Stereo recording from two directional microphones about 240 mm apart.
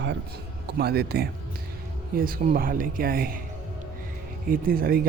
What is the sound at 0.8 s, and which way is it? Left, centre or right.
Speech, right.